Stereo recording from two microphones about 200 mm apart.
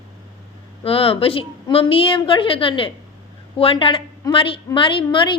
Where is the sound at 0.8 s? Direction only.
30° left (ahead or behind).